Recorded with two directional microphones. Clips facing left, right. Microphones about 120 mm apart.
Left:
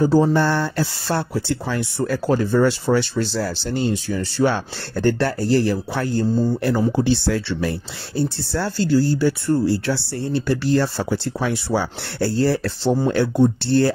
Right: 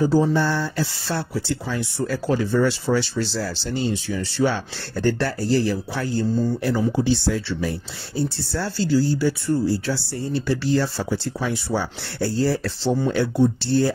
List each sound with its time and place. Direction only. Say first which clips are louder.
0.0 s speech: left 3 dB; 55° left (ahead or behind)
2.2 s speech: left 3 dB; 45° left (ahead or behind); by 7.7 s 70° left (ahead or behind)
8.5 s speech: left 3 dB; 55° left (ahead or behind)